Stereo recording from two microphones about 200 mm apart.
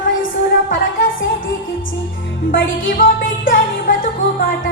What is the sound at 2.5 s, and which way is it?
Music, 45° left (ahead or behind).